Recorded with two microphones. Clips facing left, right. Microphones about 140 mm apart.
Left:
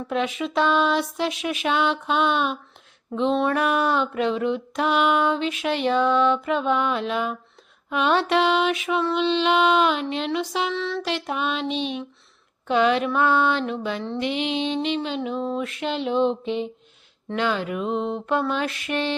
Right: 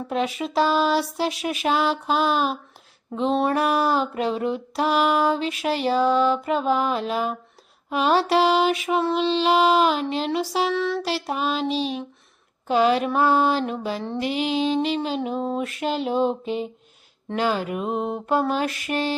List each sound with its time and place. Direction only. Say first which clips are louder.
0.1 s female singing: even; 40° right (ahead or behind)
11.0 s female singing: right 1 dB; 35° right (ahead or behind)
17.8 s a sound: left 2 dB; 5° right (ahead or behind)
18.3 s female singing: right 3 dB; 40° right (ahead or behind)